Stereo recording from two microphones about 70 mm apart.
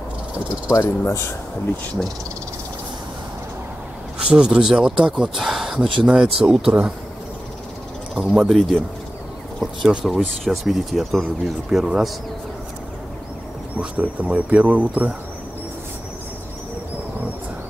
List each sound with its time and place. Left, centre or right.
0.7 s speech: left
4.3 s speech: centre
8.2 s speech: centre
13.7 s speech: right